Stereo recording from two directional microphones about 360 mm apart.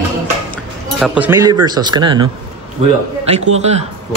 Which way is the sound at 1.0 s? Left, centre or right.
Centre.